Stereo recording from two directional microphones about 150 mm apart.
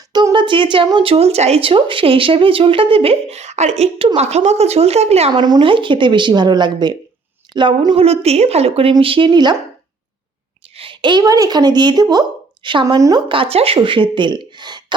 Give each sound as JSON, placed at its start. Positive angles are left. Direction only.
{"t": 0.1, "sound": "a woman's voice", "side_deg": -30}
{"t": 5.3, "sound": "a woman's voice", "side_deg": -30}
{"t": 10.8, "sound": "a woman's voice", "side_deg": -35}